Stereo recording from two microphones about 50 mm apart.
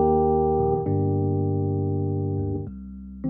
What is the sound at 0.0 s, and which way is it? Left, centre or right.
Music, centre.